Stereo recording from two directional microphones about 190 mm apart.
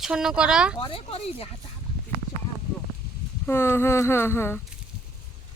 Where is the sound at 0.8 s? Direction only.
30° left (ahead or behind).